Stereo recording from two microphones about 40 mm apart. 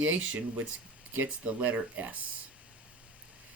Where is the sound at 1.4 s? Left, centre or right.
Right.